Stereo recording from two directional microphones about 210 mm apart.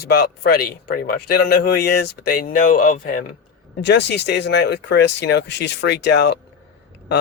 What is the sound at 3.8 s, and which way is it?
Speech, 55° left (ahead or behind).